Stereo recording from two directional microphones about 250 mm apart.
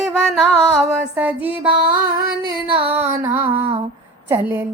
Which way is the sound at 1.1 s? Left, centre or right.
Centre.